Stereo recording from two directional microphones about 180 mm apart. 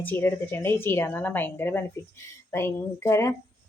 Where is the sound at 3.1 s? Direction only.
15° left (ahead or behind).